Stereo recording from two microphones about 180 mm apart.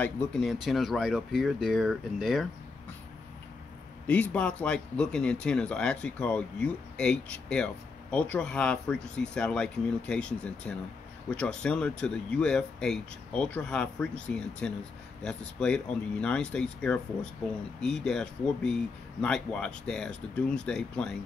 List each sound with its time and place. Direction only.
0.0 s speech: 5° left (ahead or behind)
4.1 s speech: 5° left (ahead or behind)